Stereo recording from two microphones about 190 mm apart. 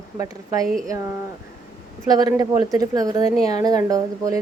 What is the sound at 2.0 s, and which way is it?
A woman's voice, 20° right (ahead or behind).